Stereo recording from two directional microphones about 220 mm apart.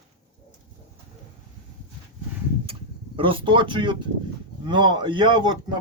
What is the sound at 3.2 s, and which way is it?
Speech, 20° right (ahead or behind).